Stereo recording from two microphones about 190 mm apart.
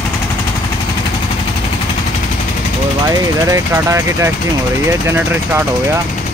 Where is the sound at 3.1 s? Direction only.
15° right (ahead or behind).